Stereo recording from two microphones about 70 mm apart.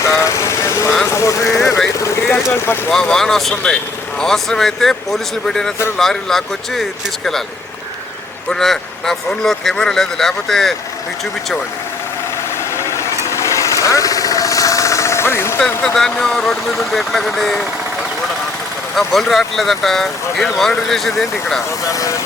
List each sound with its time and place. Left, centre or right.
0.0 s vehicle: left
1.0 s speech: left
2.3 s speech: left
2.9 s speech: centre
8.4 s speech: centre
12.7 s vehicle: left
16.0 s speech: centre
18.9 s speech: centre
21.8 s speech: left